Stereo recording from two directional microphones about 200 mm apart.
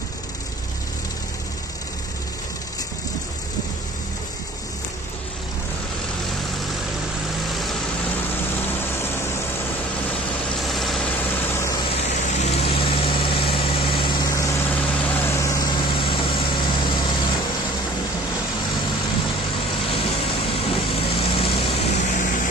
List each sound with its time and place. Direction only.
10.6 s vehicle: centre (ahead or behind)
11.5 s vehicle: 15° left (ahead or behind)
11.9 s vehicle: 35° left (ahead or behind)
19.9 s vehicle: 30° left (ahead or behind)